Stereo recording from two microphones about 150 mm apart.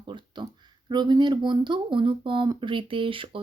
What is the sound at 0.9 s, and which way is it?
Speech, 30° right (ahead or behind).